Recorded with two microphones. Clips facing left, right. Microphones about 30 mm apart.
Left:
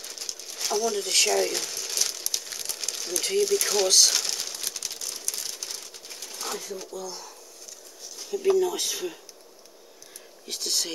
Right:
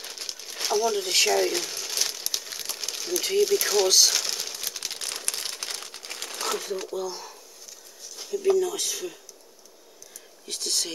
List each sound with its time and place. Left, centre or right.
0.0 s pigeon: right; by 4.7 s centre
4.9 s typewriter: right
5.3 s crumpling: right
7.1 s speech: centre
8.3 s speech: centre
10.4 s speech: centre